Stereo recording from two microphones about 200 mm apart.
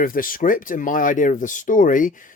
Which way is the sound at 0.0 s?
45° left (ahead or behind).